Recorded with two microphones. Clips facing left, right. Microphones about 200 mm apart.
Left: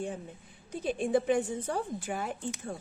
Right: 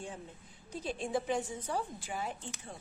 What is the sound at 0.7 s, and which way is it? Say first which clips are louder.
A woman's voice: left 7 dB; 55° left (ahead or behind).